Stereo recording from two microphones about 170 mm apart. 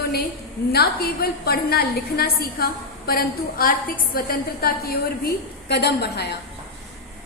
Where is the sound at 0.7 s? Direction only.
65° left (ahead or behind).